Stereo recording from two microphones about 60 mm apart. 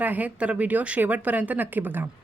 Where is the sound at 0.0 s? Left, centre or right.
Right.